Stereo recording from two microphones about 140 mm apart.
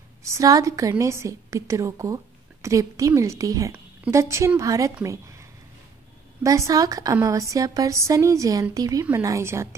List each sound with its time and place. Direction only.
0.2 s a woman's voice: 20° right (ahead or behind)
5.0 s a sound: 20° right (ahead or behind)
6.4 s a woman's voice: 25° right (ahead or behind)